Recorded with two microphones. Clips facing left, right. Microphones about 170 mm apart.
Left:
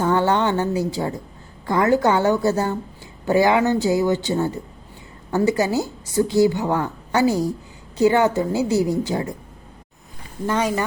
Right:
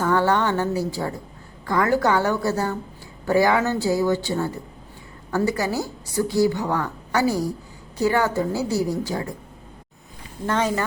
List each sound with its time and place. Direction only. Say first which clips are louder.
0.0 s a woman's voice: left 1 dB; 20° left (ahead or behind)
10.4 s speech: left 1 dB; 10° left (ahead or behind)